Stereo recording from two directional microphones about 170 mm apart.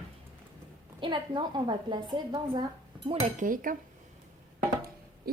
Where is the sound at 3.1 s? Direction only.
50° right (ahead or behind).